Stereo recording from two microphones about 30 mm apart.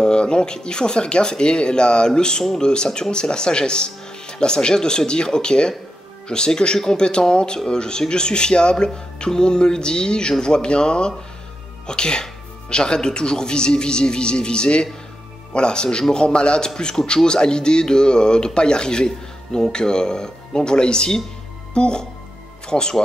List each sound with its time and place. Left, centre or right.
0.0 s a man's voice: left